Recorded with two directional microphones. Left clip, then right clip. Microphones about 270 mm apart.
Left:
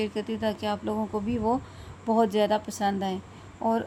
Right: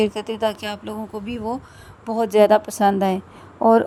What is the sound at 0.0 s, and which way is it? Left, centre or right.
Speech, right.